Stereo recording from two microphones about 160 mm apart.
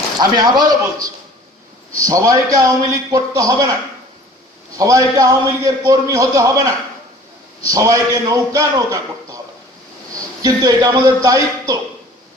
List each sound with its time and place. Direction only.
0.2 s a man's voice: 25° right (ahead or behind)
4.8 s a man's voice: 20° right (ahead or behind)
10.4 s a man's voice: 20° right (ahead or behind)